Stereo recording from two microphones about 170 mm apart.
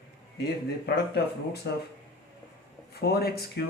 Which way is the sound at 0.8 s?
70° left (ahead or behind).